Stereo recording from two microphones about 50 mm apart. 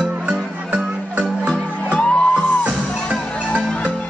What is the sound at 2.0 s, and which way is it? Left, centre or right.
Music, left.